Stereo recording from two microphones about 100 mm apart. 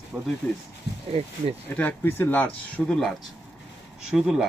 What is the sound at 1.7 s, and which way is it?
Speech, 15° left (ahead or behind).